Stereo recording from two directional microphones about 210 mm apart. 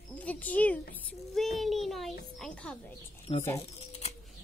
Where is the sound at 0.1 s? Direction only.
5° left (ahead or behind).